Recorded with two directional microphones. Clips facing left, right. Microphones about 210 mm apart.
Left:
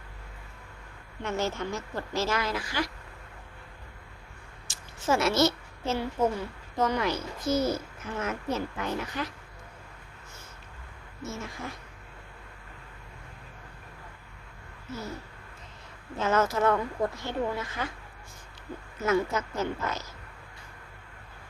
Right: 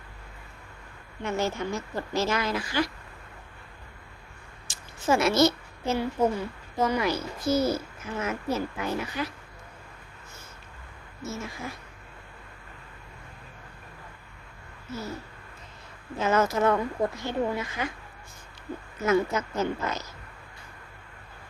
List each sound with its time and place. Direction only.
1.2 s a child's voice: 10° right (ahead or behind)
4.7 s a woman's voice: 15° right (ahead or behind)
11.2 s a child's voice: 5° right (ahead or behind)
16.2 s a child's voice: 15° right (ahead or behind)
19.0 s a child's voice: 20° right (ahead or behind)